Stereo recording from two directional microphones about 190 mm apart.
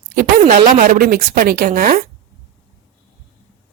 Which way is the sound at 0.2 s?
45° right (ahead or behind).